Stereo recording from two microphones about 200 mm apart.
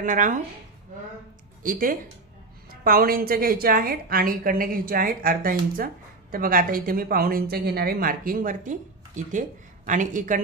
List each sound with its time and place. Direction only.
0.0 s speech: 40° right (ahead or behind)
1.6 s a woman's voice: 40° right (ahead or behind)